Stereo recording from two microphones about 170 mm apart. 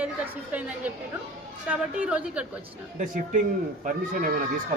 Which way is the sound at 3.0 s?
45° right (ahead or behind).